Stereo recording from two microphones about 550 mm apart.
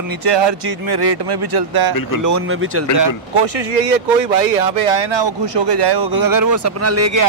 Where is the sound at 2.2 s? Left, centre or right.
Right.